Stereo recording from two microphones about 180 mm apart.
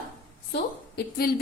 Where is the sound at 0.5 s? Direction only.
65° left (ahead or behind).